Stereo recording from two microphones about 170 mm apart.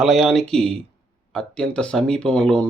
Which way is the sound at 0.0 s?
Centre (ahead or behind).